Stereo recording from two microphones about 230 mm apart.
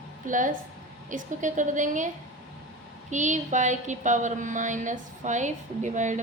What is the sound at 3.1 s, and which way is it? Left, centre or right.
A woman's voice, right.